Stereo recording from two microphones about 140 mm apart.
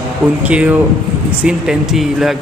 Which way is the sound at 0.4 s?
10° right (ahead or behind).